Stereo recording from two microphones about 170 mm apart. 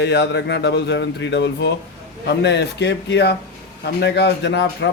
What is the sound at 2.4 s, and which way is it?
Speech, 85° left.